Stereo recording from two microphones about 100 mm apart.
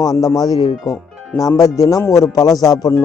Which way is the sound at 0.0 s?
35° left (ahead or behind).